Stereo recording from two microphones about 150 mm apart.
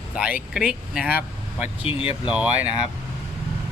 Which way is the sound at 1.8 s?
40° left (ahead or behind).